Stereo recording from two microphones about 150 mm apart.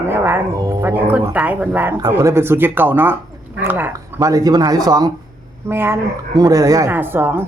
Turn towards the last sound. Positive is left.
turn(degrees=-15)  # may be behind; listen again after turning